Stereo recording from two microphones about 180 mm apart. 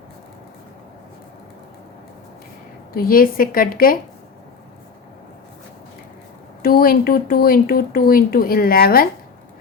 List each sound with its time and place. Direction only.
2.9 s a woman's voice: 55° left (ahead or behind)
6.6 s speech: 55° left (ahead or behind)